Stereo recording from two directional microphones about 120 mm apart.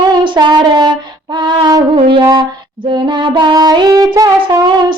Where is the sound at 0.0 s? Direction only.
40° right (ahead or behind).